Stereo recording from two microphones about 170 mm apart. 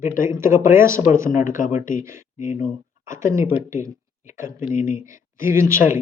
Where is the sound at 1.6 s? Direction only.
50° left (ahead or behind).